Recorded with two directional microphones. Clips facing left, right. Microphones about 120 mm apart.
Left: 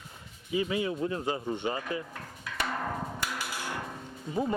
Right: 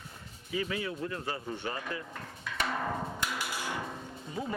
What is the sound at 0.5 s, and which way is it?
Speech, 20° left (ahead or behind).